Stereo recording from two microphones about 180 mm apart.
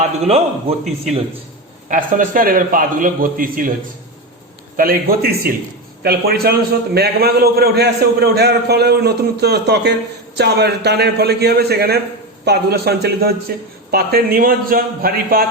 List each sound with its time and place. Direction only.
0.0 s a man's voice: 35° right (ahead or behind)
1.9 s a man's voice: 45° right (ahead or behind)
4.8 s a man's voice: 55° right (ahead or behind)